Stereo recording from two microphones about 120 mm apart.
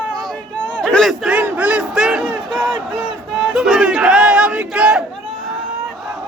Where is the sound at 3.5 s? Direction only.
5° right (ahead or behind).